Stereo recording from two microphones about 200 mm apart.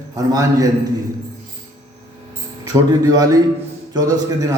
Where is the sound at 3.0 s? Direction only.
20° right (ahead or behind).